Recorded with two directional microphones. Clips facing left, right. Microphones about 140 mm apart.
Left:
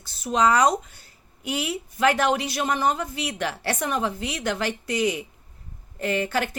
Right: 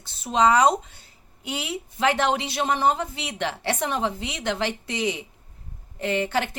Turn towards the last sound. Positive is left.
turn(degrees=-25)  # may be behind; listen again after turning